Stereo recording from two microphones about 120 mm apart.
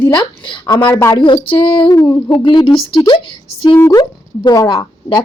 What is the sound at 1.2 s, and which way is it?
Speech, 45° left (ahead or behind).